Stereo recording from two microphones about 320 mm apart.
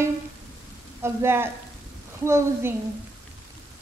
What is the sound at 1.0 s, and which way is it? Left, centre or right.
A woman's voice, centre.